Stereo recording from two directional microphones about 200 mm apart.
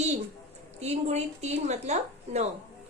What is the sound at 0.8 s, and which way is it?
A woman's voice, 35° right (ahead or behind).